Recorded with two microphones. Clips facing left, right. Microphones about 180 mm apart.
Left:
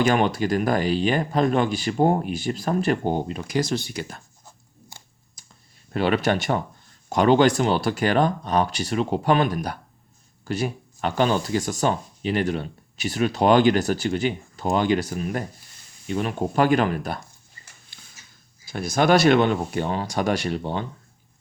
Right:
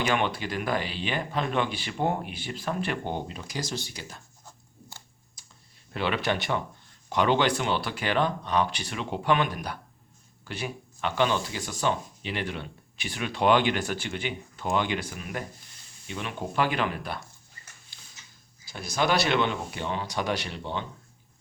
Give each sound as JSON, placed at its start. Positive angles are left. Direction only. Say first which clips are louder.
{"t": 0.0, "sound": "speech", "louder": "left 7 dB", "side_deg": 40}
{"t": 5.4, "sound": "clicking", "louder": "left 4 dB", "side_deg": 50}
{"t": 5.9, "sound": "speech", "louder": "left 7 dB", "side_deg": 45}
{"t": 18.6, "sound": "speech", "louder": "left 6 dB", "side_deg": 50}